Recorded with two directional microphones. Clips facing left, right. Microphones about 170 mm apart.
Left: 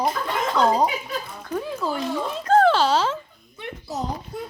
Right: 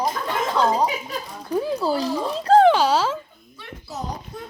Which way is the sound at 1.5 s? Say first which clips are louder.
Right 5 dB; 35° right (ahead or behind).